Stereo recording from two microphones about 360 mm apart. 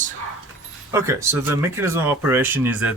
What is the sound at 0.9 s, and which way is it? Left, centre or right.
Speech, centre.